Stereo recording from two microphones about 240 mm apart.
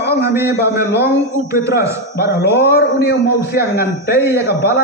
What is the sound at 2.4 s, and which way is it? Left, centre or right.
A man's voice, left.